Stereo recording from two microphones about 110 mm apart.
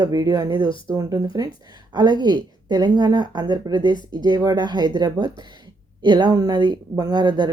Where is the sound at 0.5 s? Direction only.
50° left (ahead or behind).